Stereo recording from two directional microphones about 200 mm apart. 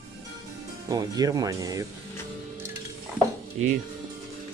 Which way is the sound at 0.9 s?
20° right (ahead or behind).